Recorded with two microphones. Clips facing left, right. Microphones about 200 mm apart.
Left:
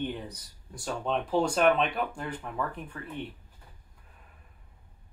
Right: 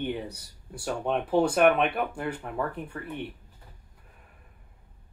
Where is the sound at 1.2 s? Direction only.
60° right (ahead or behind).